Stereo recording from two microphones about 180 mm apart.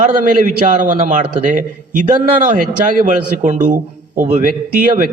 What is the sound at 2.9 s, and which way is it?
A man's voice, 50° right (ahead or behind).